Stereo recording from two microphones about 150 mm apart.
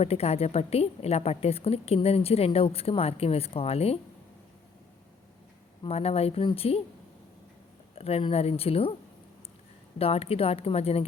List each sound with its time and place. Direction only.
0.0 s a woman's voice: 45° left (ahead or behind)
5.8 s a woman's voice: 40° left (ahead or behind)
7.9 s a woman's voice: 40° left (ahead or behind)
10.0 s a woman's voice: 40° left (ahead or behind)